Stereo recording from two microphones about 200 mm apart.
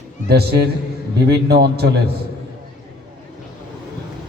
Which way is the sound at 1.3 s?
55° right (ahead or behind).